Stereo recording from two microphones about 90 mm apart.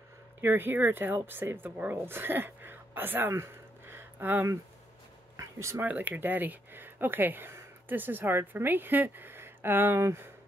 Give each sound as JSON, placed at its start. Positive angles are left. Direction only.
{"t": 0.4, "sound": "speech", "side_deg": -25}
{"t": 5.4, "sound": "a sound", "side_deg": -30}
{"t": 5.9, "sound": "speech", "side_deg": -20}